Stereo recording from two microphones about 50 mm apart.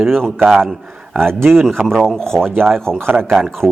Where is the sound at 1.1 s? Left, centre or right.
Right.